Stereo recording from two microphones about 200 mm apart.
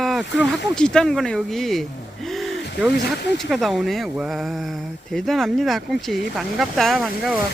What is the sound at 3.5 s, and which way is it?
Speech, centre (ahead or behind).